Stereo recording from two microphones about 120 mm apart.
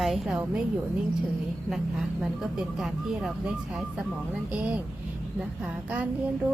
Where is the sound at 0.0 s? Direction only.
5° right (ahead or behind).